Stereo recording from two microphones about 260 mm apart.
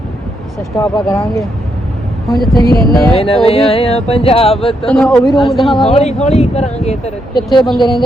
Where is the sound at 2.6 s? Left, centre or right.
Left.